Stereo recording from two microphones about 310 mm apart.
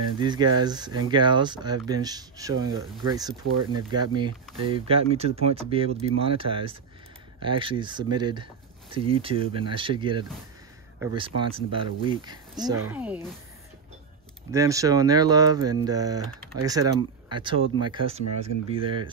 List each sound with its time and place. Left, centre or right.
0.2 s speech: centre
14.5 s speech: centre